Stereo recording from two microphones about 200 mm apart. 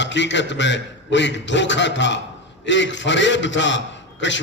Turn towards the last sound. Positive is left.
turn(degrees=65)  # may be behind; listen again after turning